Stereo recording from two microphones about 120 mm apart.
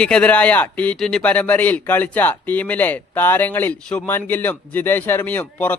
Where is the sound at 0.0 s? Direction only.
10° left (ahead or behind).